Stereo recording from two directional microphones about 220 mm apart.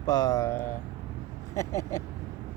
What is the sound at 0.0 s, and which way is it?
Speech, 15° left (ahead or behind).